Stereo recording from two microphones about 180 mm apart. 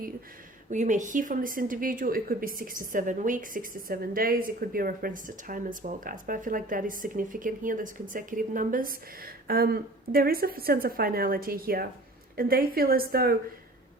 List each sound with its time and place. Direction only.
0.7 s a woman's voice: 45° right (ahead or behind)